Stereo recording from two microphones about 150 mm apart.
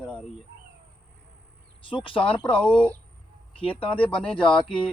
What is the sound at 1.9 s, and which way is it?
Speech, 35° left (ahead or behind).